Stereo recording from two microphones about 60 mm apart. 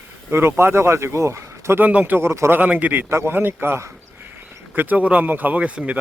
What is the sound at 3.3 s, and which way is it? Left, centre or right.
Speech, right.